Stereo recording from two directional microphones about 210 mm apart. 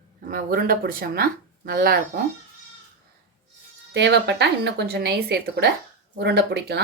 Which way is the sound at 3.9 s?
55° right (ahead or behind).